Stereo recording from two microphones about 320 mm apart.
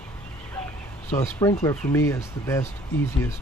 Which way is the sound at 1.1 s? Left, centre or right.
Centre.